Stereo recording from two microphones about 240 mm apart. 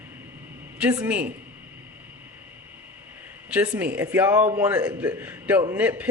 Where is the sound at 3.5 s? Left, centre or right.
Centre.